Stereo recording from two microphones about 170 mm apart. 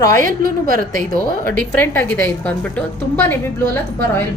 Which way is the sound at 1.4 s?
10° left (ahead or behind).